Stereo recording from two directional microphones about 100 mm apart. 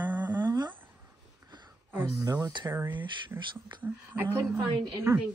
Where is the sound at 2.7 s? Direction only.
20° right (ahead or behind).